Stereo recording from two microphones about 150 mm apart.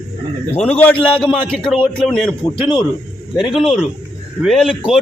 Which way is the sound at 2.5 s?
30° left (ahead or behind).